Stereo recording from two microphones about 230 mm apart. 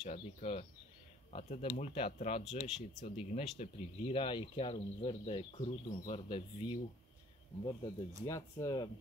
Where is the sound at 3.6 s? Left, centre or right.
Left.